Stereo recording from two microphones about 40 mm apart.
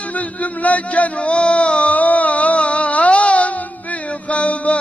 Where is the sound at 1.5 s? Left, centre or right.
Left.